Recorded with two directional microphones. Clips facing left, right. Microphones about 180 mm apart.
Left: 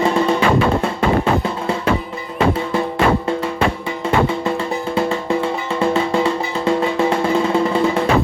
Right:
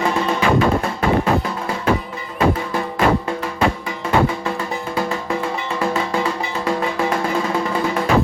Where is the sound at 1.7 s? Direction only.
25° left (ahead or behind).